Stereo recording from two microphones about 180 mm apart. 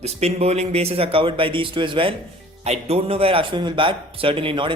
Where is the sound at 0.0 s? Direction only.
35° right (ahead or behind).